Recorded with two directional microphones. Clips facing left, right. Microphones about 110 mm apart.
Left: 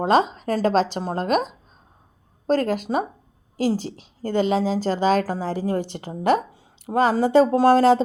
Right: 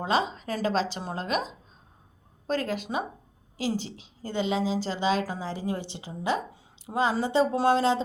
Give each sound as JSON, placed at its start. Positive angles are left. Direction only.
{"t": 0.0, "sound": "a woman's voice", "side_deg": 50}